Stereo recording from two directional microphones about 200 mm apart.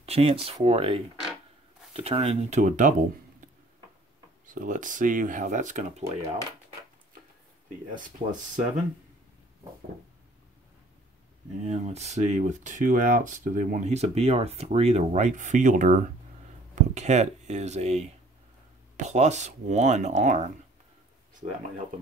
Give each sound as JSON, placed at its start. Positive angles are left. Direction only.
{"t": 0.0, "sound": "speech", "side_deg": -30}
{"t": 4.6, "sound": "speech", "side_deg": -40}
{"t": 7.9, "sound": "speech", "side_deg": -40}
{"t": 11.6, "sound": "speech", "side_deg": -35}